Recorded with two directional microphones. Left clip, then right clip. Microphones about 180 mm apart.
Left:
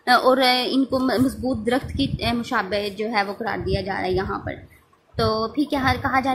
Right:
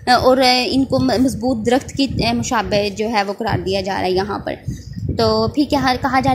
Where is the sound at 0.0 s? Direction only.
25° right (ahead or behind).